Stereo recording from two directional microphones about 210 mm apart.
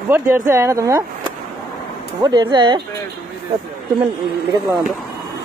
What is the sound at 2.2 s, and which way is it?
Speech, 20° right (ahead or behind).